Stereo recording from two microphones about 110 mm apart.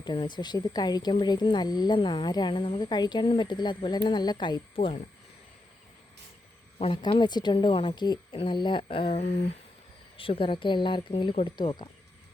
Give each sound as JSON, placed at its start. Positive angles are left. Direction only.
{"t": 0.0, "sound": "speech", "side_deg": 45}
{"t": 6.7, "sound": "speech", "side_deg": 65}
{"t": 7.0, "sound": "speech", "side_deg": 40}
{"t": 10.2, "sound": "speech", "side_deg": 55}